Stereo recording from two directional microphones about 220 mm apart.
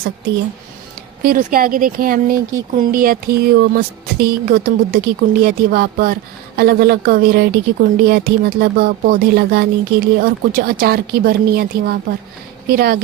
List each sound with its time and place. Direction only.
1.2 s speech: 40° right (ahead or behind)